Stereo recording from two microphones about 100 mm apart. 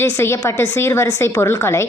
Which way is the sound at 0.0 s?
25° left (ahead or behind).